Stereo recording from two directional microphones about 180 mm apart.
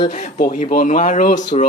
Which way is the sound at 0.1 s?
40° left (ahead or behind).